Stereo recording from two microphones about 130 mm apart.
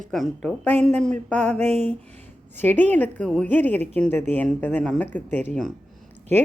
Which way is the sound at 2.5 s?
15° left (ahead or behind).